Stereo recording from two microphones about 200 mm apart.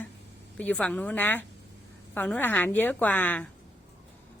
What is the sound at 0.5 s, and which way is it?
A woman's voice, 5° left (ahead or behind).